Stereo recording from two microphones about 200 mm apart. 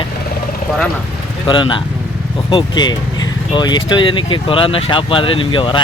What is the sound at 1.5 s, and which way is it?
Speech, 25° left (ahead or behind).